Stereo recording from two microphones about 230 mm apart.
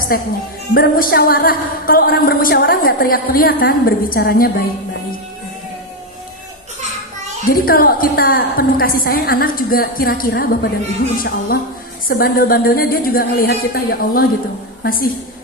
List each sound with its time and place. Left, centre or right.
0.7 s a woman's voice: left
7.4 s a woman's voice: left